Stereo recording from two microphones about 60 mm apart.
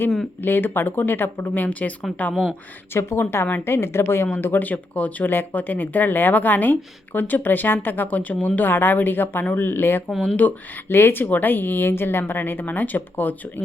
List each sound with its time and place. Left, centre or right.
0.4 s speech: left
2.9 s a woman's voice: left